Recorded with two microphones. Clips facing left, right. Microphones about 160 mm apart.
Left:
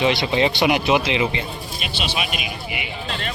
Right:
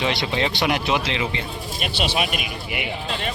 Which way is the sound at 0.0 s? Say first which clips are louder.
Left 4 dB; 5° left (ahead or behind).